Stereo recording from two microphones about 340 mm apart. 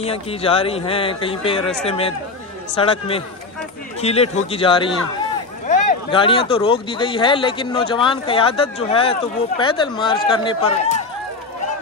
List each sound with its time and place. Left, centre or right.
0.0 s speech: centre